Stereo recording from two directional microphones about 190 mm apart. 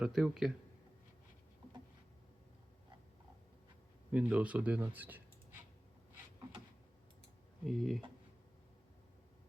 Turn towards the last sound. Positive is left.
turn(degrees=0)  # may be behind; listen again after turning